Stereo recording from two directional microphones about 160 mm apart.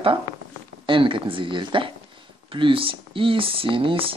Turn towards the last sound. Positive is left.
turn(degrees=-35)  # may be behind; listen again after turning